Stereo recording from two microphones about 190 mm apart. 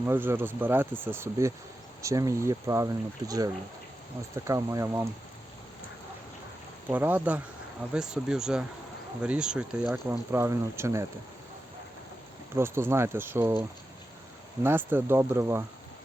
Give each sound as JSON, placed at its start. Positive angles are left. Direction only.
{"t": 0.0, "sound": "speech", "side_deg": -10}
{"t": 6.8, "sound": "speech", "side_deg": -10}
{"t": 12.5, "sound": "speech", "side_deg": -15}